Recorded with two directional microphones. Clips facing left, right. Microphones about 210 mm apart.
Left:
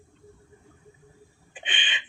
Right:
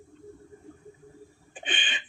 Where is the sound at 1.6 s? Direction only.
40° right (ahead or behind).